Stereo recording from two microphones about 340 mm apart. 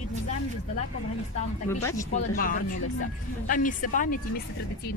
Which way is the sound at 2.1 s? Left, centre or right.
Left.